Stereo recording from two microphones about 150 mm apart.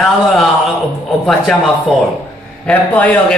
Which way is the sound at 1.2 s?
Centre (ahead or behind).